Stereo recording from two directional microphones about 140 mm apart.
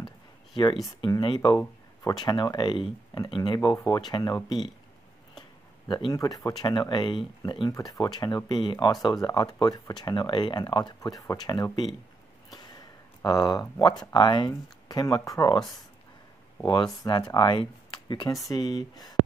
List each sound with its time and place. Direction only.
1.0 s speech: 30° left (ahead or behind)
5.9 s speech: 35° left (ahead or behind)
6.1 s speech: 25° left (ahead or behind)
13.2 s speech: 25° left (ahead or behind)
16.6 s speech: 25° left (ahead or behind)